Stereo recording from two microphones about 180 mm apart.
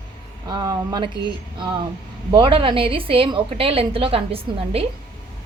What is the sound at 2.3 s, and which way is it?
A woman's voice, 30° right (ahead or behind).